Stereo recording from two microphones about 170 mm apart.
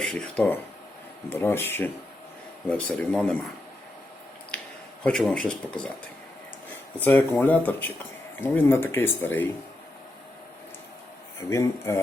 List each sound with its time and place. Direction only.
0.0 s speech: 5° left (ahead or behind)
5.0 s speech: 5° left (ahead or behind)
7.0 s speech: 10° left (ahead or behind)
11.4 s speech: 15° left (ahead or behind)